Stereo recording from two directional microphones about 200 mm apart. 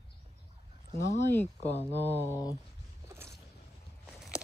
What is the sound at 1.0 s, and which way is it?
Speech, 15° left (ahead or behind).